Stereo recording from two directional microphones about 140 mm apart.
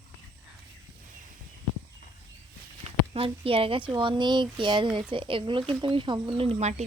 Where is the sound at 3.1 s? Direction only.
40° right (ahead or behind).